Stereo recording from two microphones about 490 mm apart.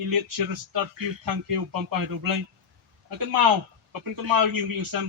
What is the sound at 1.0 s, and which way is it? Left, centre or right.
Speech, right.